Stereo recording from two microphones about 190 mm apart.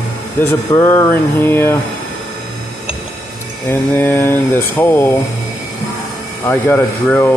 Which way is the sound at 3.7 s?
10° left (ahead or behind).